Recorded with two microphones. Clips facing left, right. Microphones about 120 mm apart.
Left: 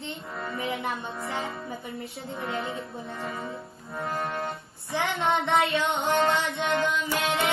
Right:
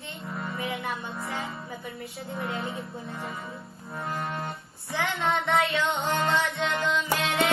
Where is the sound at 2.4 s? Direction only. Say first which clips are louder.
Left 1 dB; 25° right (ahead or behind).